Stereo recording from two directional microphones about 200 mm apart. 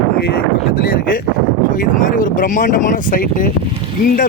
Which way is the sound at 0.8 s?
45° left (ahead or behind).